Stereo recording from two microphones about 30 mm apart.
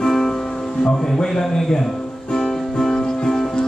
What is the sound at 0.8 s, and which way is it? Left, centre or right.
A man's voice, centre.